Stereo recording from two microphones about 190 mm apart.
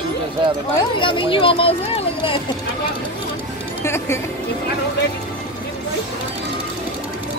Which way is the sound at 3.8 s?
15° left (ahead or behind).